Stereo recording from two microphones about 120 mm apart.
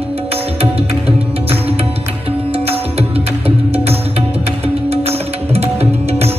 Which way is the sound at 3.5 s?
55° right (ahead or behind).